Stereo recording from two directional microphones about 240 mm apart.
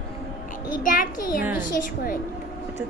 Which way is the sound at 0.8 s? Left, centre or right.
Left.